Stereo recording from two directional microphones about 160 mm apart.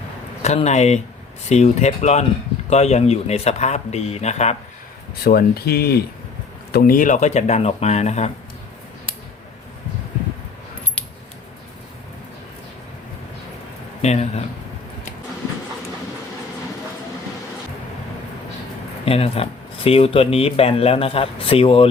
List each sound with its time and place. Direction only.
0.4 s speech: 45° left (ahead or behind)
5.2 s speech: 75° left (ahead or behind); by 8.3 s 45° left (ahead or behind)
14.0 s speech: 45° left (ahead or behind)
19.0 s speech: 35° left (ahead or behind)